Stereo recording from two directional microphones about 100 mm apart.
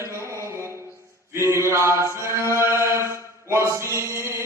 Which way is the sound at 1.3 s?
25° right (ahead or behind).